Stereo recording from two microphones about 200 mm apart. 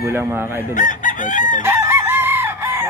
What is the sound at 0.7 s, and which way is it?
Chicken, 40° left (ahead or behind).